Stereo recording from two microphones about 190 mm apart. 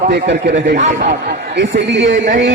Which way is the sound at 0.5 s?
40° right (ahead or behind).